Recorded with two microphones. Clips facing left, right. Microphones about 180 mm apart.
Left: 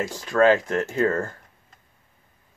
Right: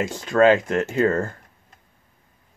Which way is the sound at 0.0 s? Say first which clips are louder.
Right 2 dB; 20° right (ahead or behind).